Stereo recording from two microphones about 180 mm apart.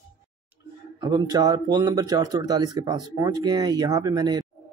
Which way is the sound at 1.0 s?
20° right (ahead or behind).